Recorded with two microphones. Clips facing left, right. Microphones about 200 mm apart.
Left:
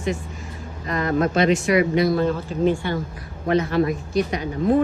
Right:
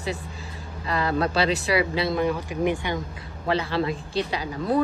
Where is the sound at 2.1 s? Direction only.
15° right (ahead or behind).